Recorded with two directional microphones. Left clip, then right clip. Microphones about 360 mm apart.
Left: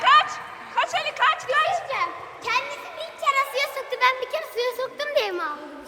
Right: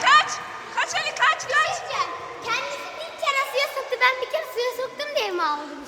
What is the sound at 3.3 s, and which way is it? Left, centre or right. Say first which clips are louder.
Music: left 1 dB; centre.